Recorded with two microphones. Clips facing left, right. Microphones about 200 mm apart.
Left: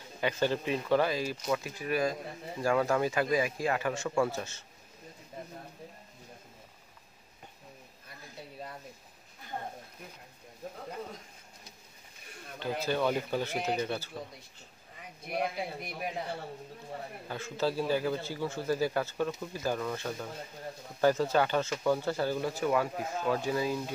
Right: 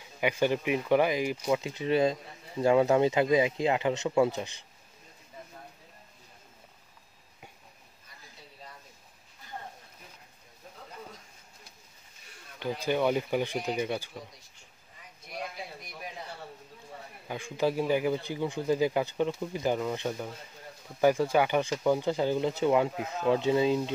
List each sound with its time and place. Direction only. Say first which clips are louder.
0.2 s speech: right 3 dB; 15° right (ahead or behind)
12.5 s speech: right 2 dB; 15° right (ahead or behind)
15.2 s a man's voice: left 6 dB; 60° left (ahead or behind)
17.3 s speech: right 3 dB; 15° right (ahead or behind)